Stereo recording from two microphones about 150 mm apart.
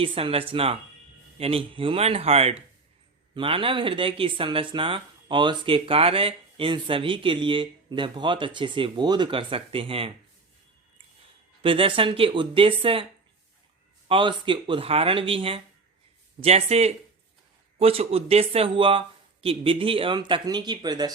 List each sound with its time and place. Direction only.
0.0 s speech: 35° right (ahead or behind)
11.6 s speech: 35° right (ahead or behind)
14.1 s speech: 35° right (ahead or behind)